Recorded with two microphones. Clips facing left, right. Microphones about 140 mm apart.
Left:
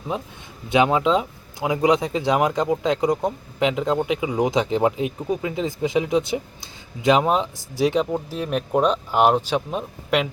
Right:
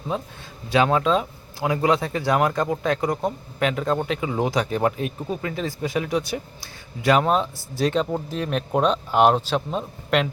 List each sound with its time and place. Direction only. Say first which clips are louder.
0.1 s speech: right 1 dB; 20° left (ahead or behind)